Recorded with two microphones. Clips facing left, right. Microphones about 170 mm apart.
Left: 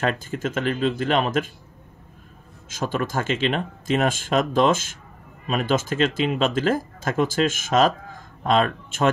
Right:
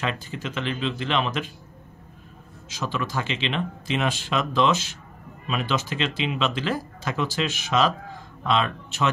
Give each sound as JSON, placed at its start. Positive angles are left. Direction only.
{"t": 0.0, "sound": "speech", "side_deg": 50}
{"t": 2.7, "sound": "speech", "side_deg": 50}